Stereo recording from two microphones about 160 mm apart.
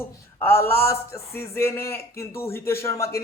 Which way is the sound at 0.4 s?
15° left (ahead or behind).